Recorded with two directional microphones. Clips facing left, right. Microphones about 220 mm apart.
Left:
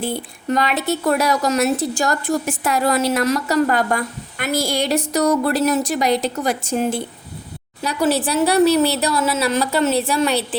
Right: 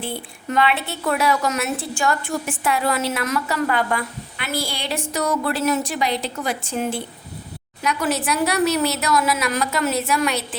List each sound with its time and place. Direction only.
0.0 s a woman's voice: 40° left (ahead or behind)